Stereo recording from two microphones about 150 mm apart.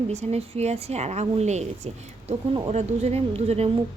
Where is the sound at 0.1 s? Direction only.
45° right (ahead or behind).